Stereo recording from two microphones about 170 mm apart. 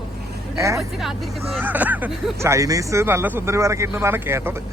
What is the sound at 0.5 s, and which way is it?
Speech, 20° right (ahead or behind).